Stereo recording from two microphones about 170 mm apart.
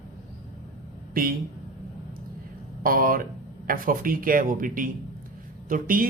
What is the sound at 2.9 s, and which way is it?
Speech, 55° right (ahead or behind).